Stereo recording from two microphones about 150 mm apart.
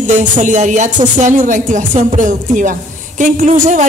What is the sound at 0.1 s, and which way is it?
A man's voice, 55° right (ahead or behind).